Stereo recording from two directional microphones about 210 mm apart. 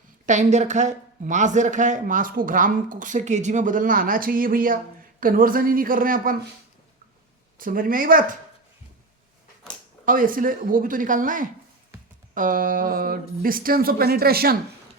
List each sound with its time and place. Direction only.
0.3 s speech: 35° right (ahead or behind)
7.6 s speech: 40° right (ahead or behind)
10.1 s speech: 40° right (ahead or behind)